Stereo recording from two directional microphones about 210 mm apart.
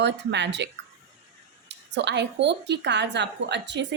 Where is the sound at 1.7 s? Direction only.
55° right (ahead or behind).